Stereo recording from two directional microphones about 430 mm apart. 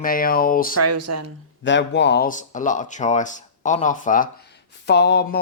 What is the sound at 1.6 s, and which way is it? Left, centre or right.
Speech, left.